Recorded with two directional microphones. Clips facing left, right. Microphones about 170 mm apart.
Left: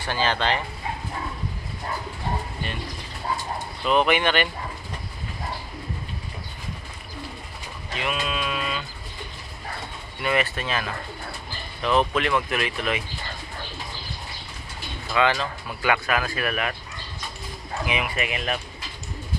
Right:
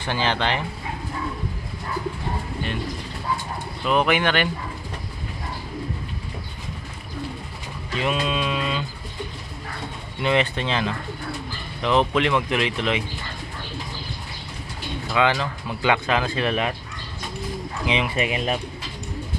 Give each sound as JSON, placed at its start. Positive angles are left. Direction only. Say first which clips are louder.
{"t": 0.1, "sound": "speech", "louder": "even", "side_deg": -15}
{"t": 3.8, "sound": "speech", "louder": "even", "side_deg": 0}
{"t": 4.2, "sound": "speech", "louder": "right 1 dB", "side_deg": 10}
{"t": 7.9, "sound": "a sound", "louder": "right 4 dB", "side_deg": -30}
{"t": 10.2, "sound": "speech", "louder": "right 3 dB", "side_deg": -20}
{"t": 15.1, "sound": "speech", "louder": "right 1 dB", "side_deg": -15}
{"t": 17.8, "sound": "speech", "louder": "right 4 dB", "side_deg": -25}